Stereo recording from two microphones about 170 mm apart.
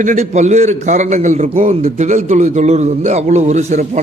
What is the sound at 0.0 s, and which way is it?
A man's voice, 45° right (ahead or behind).